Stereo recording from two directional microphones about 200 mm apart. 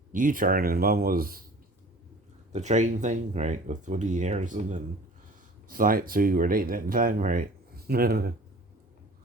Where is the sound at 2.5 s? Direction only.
35° right (ahead or behind).